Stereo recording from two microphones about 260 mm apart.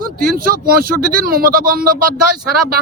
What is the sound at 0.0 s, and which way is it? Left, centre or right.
Speech, right.